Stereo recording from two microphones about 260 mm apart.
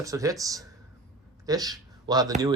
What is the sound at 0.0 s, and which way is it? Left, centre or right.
Speech, centre.